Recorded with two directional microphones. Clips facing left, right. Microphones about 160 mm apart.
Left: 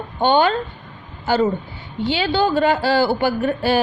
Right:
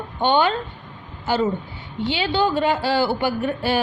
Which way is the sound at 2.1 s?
40° left (ahead or behind).